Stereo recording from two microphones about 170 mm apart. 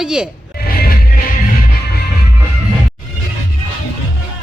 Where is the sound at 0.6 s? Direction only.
60° left (ahead or behind).